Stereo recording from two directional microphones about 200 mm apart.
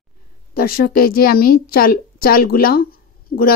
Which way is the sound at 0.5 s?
45° left (ahead or behind).